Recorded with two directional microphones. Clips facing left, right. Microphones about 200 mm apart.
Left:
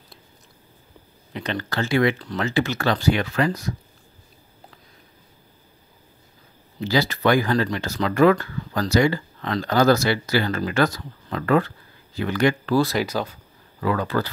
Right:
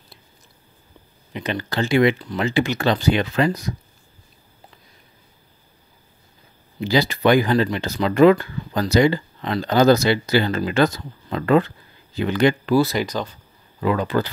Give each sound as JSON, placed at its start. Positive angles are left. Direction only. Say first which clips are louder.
{"t": 1.3, "sound": "speech", "louder": "right 2 dB", "side_deg": -10}
{"t": 6.8, "sound": "speech", "louder": "right 2 dB", "side_deg": -15}
{"t": 12.7, "sound": "speech", "louder": "right 2 dB", "side_deg": 0}
{"t": 13.7, "sound": "speech", "louder": "right 3 dB", "side_deg": -20}